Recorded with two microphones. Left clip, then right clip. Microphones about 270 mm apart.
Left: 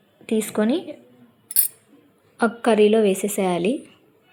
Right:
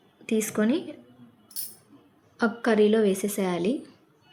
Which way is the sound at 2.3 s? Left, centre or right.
Centre.